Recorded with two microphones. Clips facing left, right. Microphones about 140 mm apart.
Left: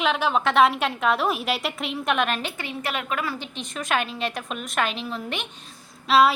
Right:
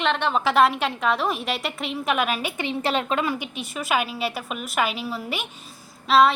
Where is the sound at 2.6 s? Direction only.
25° right (ahead or behind).